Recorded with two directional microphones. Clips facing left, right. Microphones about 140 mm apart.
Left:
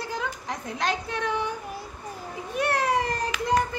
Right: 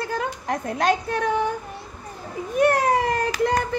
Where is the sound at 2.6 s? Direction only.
50° right (ahead or behind).